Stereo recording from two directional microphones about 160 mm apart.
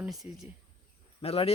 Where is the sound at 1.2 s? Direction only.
35° left (ahead or behind).